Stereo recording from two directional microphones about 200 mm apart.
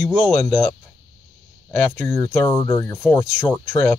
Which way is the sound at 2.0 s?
5° left (ahead or behind).